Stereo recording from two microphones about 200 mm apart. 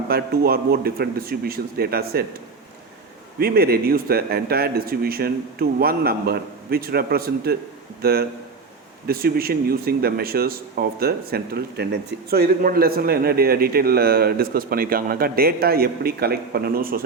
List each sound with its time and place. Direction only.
0.1 s a man's voice: 50° right (ahead or behind)
3.3 s a man's voice: 50° right (ahead or behind)